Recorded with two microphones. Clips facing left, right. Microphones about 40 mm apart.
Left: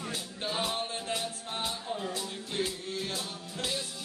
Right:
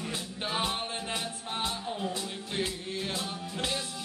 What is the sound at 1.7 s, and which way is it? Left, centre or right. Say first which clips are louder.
Music: right 1 dB; centre.